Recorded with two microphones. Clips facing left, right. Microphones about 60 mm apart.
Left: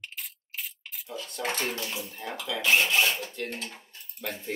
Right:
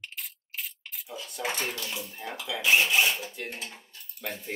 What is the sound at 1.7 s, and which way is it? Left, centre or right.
Speech, left.